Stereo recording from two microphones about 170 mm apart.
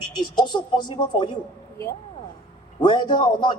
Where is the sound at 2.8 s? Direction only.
25° left (ahead or behind).